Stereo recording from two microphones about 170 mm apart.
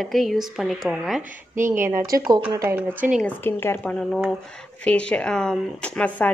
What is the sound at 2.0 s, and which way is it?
Speech, 20° right (ahead or behind).